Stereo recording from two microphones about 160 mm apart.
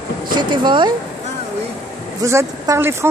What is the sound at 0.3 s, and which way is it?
Speech, 30° right (ahead or behind).